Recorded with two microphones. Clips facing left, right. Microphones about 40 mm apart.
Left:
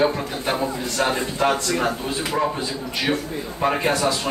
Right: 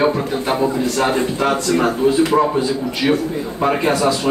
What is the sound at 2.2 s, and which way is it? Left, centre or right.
Speech, right.